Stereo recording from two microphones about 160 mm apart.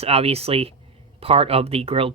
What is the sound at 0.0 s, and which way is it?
Speech, 40° right (ahead or behind).